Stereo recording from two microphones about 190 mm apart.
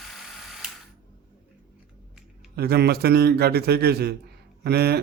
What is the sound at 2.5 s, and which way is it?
A man's voice, 55° right (ahead or behind).